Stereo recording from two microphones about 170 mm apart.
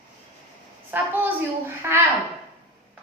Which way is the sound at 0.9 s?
10° right (ahead or behind).